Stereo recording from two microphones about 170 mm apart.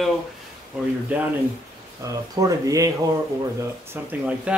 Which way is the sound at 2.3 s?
20° right (ahead or behind).